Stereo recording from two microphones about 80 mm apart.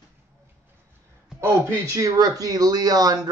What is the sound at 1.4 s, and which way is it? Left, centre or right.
Speech, right.